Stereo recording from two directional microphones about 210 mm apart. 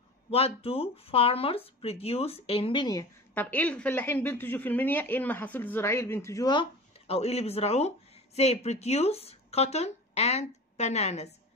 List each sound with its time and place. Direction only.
0.3 s speech: 25° left (ahead or behind)